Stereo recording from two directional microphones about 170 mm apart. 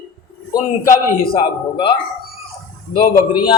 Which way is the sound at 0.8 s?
55° left (ahead or behind).